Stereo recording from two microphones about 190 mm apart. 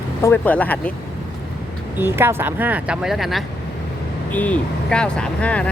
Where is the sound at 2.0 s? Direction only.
10° right (ahead or behind).